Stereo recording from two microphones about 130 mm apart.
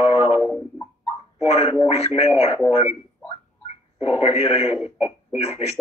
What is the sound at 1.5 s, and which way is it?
Speech, 50° left (ahead or behind).